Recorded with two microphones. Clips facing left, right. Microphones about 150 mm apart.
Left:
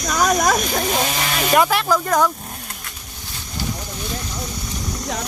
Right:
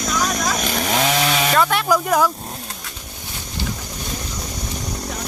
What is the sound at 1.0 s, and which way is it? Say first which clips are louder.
Speech: right 3 dB; 85° right.